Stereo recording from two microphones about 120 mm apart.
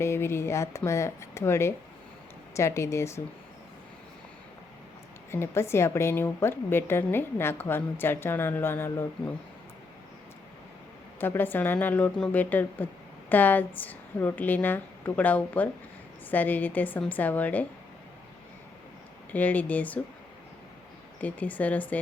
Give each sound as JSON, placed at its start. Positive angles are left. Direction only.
{"t": 0.0, "sound": "a woman's voice", "side_deg": 20}
{"t": 5.3, "sound": "a woman's voice", "side_deg": 20}
{"t": 11.2, "sound": "a woman's voice", "side_deg": 15}
{"t": 19.3, "sound": "a woman's voice", "side_deg": 15}
{"t": 21.2, "sound": "a woman's voice", "side_deg": 15}